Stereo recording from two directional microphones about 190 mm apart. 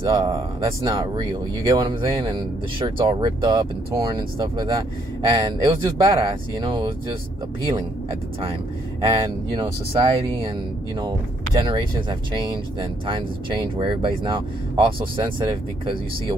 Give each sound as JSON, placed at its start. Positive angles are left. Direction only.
{"t": 0.0, "sound": "speech", "side_deg": -25}
{"t": 9.1, "sound": "speech", "side_deg": -25}
{"t": 11.5, "sound": "speech", "side_deg": -25}